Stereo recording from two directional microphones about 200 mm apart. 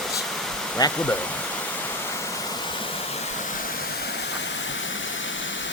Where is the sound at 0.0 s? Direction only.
Centre (ahead or behind).